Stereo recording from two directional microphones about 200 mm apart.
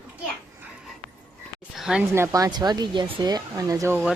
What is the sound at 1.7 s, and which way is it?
Speech, 5° right (ahead or behind).